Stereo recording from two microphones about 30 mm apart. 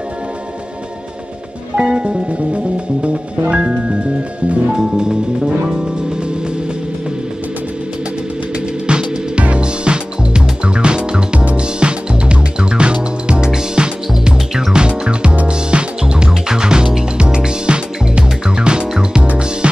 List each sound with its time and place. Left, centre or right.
1.8 s music: right
4.7 s music: right
8.8 s music: right
11.3 s music: right